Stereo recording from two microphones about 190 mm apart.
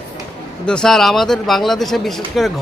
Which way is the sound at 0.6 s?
5° left (ahead or behind).